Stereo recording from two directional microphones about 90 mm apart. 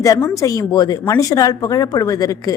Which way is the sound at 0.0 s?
40° left (ahead or behind).